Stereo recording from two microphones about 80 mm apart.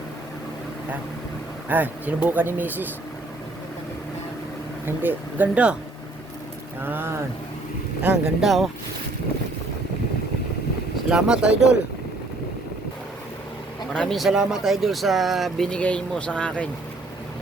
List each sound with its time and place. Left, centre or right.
1.7 s speech: right
4.9 s speech: right
6.8 s speech: right
8.0 s speech: centre
8.4 s speech: centre
11.1 s speech: centre
13.9 s a man's voice: centre
14.3 s speech: centre